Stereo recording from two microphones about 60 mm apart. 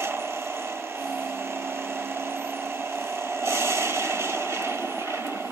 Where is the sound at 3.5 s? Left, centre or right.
Right.